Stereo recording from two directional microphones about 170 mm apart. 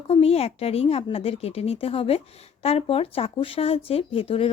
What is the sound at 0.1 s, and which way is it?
A woman's voice, 35° left (ahead or behind).